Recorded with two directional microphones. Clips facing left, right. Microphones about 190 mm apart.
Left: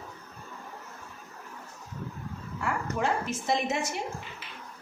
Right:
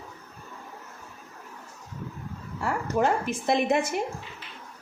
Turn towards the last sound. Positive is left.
turn(degrees=-55)  # may be behind; listen again after turning